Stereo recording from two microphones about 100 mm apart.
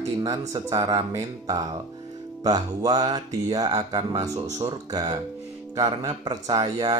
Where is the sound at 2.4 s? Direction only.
40° right (ahead or behind).